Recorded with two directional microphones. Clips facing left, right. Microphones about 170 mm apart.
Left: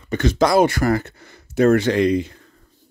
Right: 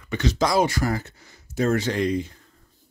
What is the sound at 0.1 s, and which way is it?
Speech, 55° left (ahead or behind).